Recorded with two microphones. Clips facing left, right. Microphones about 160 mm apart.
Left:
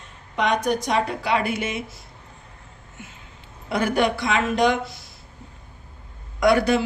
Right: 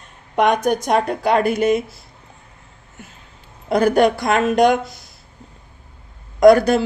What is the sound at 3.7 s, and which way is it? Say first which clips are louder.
Speech: right 7 dB; 40° right (ahead or behind).